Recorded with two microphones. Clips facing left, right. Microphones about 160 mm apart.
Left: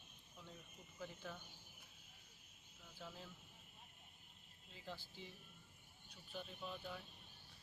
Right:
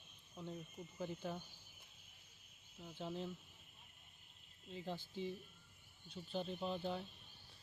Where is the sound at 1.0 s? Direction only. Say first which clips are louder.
Right 7 dB; 20° right (ahead or behind).